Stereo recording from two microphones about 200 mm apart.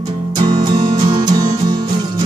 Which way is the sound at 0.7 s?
25° right (ahead or behind).